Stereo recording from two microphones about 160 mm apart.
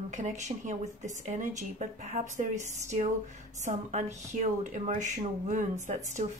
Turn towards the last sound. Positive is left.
turn(degrees=-50)  # may be behind; listen again after turning